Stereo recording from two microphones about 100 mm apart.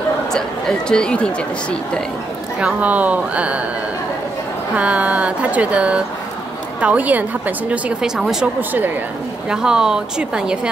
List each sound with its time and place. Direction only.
0.3 s speech: 5° left (ahead or behind)
2.6 s speech: 15° right (ahead or behind)
4.7 s speech: 15° right (ahead or behind)
8.2 s speech: 5° right (ahead or behind)
8.5 s speech: 20° right (ahead or behind)
9.5 s speech: 5° right (ahead or behind)